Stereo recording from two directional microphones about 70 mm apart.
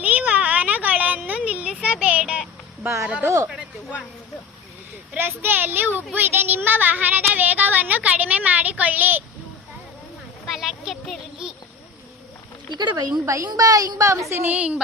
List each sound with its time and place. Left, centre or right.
0.0 s a sound: right
1.3 s music: centre
2.8 s speech: right
5.1 s speech: right
10.4 s a sound: centre
12.7 s speech: right
13.2 s a woman's voice: right
13.5 s a woman's voice: right
14.4 s speech: right